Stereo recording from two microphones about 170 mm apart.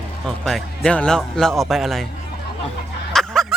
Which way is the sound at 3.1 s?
5° left (ahead or behind).